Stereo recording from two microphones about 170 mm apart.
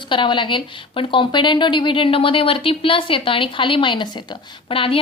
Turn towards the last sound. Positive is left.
turn(degrees=30)  # may be behind; listen again after turning